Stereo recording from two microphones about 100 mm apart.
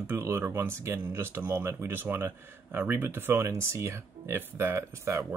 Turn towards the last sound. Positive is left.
turn(degrees=-25)  # may be behind; listen again after turning